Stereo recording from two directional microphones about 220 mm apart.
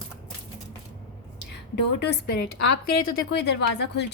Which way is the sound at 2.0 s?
50° left (ahead or behind).